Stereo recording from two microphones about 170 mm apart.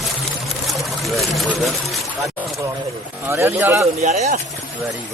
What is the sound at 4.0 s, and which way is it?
Speech, 40° right (ahead or behind).